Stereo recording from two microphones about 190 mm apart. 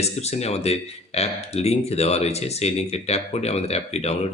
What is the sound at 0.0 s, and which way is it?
Speech, 35° left (ahead or behind).